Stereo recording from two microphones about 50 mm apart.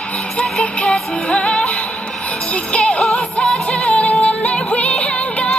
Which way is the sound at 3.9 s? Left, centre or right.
Left.